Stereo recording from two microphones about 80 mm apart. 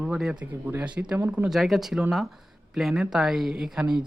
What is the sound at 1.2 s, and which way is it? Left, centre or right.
Speech, right.